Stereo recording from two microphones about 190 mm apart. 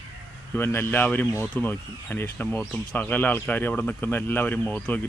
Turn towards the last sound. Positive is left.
turn(degrees=10)  # may be behind; listen again after turning